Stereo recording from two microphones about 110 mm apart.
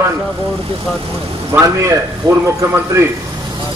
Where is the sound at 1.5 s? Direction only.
20° right (ahead or behind).